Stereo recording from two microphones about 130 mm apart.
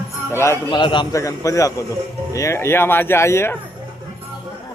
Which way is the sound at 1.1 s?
25° left (ahead or behind).